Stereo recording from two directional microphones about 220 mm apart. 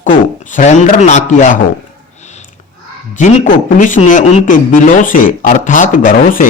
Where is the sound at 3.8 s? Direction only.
35° left (ahead or behind).